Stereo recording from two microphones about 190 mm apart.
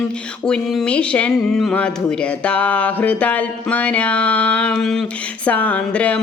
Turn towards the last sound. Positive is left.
turn(degrees=5)  # may be behind; listen again after turning